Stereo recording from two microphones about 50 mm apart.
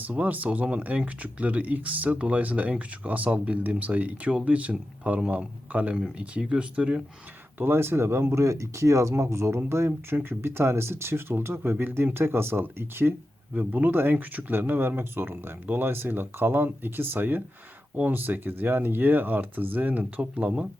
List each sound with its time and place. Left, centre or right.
0.0 s speech: right
7.6 s speech: right
8.4 s speech: right
9.6 s speech: right
13.5 s speech: right